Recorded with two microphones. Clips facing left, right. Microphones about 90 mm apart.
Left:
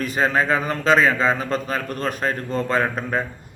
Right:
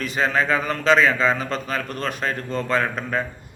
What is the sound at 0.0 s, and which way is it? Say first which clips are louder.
A man's voice: left 1 dB; 40° left (ahead or behind).